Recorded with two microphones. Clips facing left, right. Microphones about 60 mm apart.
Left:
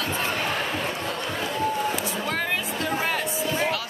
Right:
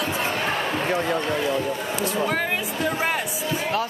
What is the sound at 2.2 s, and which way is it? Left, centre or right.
Music, centre.